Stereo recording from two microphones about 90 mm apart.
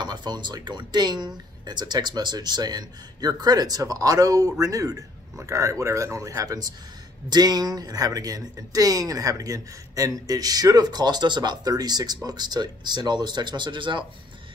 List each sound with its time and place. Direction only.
0.0 s speech: 55° right (ahead or behind)